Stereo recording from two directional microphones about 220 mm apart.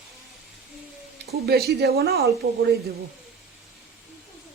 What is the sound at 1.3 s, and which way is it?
Speech, 45° right (ahead or behind).